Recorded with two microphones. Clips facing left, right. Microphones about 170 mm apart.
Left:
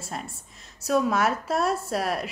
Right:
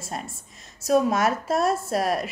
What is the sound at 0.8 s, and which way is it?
Speech, 40° right (ahead or behind).